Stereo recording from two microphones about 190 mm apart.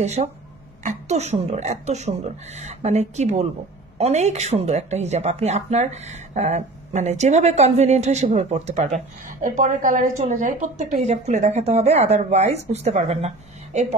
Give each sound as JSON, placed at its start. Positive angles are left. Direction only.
{"t": 0.0, "sound": "speech", "side_deg": -35}